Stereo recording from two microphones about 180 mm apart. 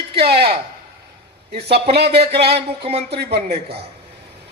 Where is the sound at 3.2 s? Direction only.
65° right (ahead or behind).